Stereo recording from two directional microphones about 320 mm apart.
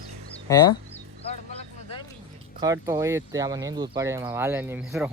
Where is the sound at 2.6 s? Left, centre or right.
Centre.